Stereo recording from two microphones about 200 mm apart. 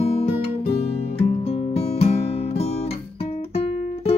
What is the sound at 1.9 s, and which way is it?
Music, 30° left (ahead or behind).